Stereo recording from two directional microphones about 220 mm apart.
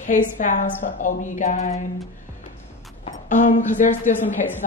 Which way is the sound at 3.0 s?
35° left (ahead or behind).